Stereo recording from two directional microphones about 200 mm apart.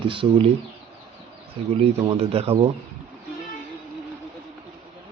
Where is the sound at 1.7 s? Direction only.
30° right (ahead or behind).